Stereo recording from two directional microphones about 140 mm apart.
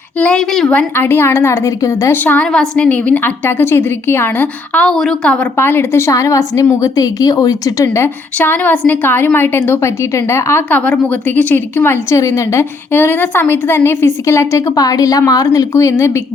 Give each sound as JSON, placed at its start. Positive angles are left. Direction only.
{"t": 0.2, "sound": "a woman's voice", "side_deg": 5}